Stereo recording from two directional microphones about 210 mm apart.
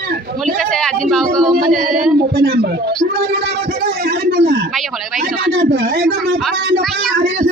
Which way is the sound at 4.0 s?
50° right (ahead or behind).